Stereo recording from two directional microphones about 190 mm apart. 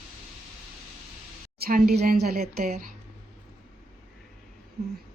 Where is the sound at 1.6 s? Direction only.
50° right (ahead or behind).